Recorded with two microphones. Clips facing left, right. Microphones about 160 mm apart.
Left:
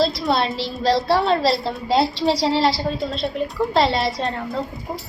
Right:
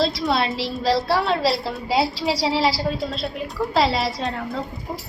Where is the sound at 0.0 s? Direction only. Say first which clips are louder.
Left 2 dB; centre (ahead or behind).